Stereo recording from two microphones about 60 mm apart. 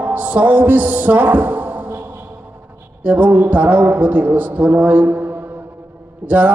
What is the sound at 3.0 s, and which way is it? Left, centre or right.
A man's voice, right.